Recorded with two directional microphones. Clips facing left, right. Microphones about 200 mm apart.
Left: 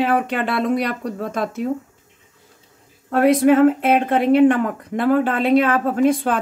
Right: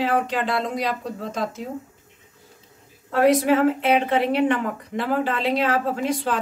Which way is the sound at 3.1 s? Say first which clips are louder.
Left 4 dB; 55° left (ahead or behind).